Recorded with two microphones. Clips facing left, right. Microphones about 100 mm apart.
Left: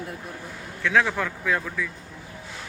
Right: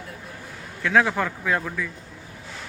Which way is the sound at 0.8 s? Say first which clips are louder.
Right 2 dB; 5° right (ahead or behind).